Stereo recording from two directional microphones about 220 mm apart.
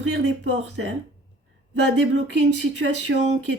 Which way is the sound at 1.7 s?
55° right (ahead or behind).